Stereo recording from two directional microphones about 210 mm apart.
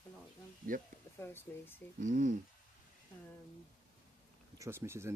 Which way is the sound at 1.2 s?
10° left (ahead or behind).